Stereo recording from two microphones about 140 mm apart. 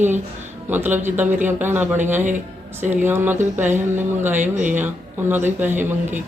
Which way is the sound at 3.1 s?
15° right (ahead or behind).